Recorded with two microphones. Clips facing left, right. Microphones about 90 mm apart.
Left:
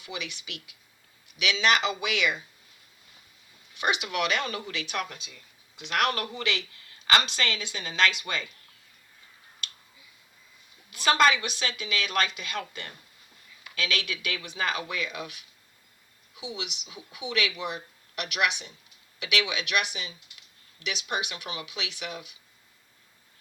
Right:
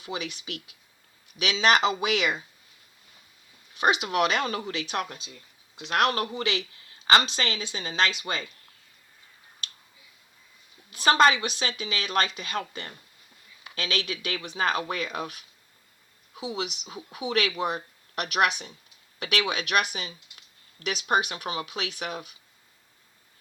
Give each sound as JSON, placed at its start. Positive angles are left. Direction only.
{"t": 0.0, "sound": "speech", "side_deg": -35}
{"t": 3.8, "sound": "speech", "side_deg": -35}
{"t": 10.9, "sound": "speech", "side_deg": -35}